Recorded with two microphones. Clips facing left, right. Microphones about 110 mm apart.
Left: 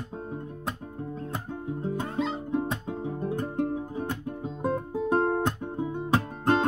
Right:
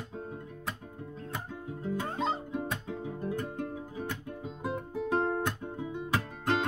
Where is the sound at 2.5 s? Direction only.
30° left (ahead or behind).